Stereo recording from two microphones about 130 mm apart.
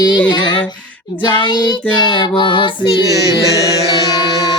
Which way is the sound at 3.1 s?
25° right (ahead or behind).